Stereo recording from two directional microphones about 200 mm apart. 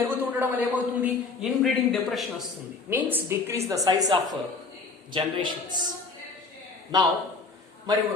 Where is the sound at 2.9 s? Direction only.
10° right (ahead or behind).